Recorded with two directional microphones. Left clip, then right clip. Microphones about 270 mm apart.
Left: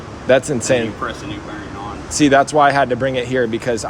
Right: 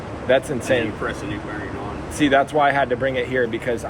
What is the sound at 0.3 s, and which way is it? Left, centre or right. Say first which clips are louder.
Speech: left 4 dB; left.